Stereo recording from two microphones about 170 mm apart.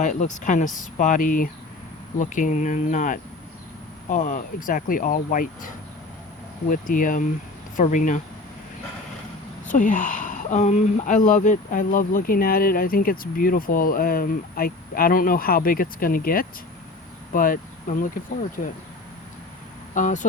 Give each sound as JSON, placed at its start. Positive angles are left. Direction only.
{"t": 0.0, "sound": "speech", "side_deg": 45}
{"t": 9.6, "sound": "speech", "side_deg": 50}
{"t": 19.9, "sound": "speech", "side_deg": 50}